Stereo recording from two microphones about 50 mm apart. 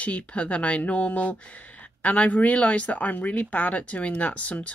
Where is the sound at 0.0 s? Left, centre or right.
Left.